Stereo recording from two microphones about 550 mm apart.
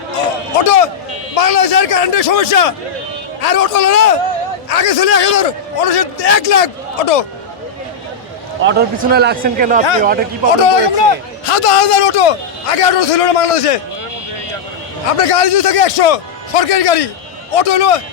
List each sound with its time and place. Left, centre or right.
1.4 s a man's voice: left
8.6 s a man's voice: centre
10.6 s a man's voice: left
15.0 s a man's voice: left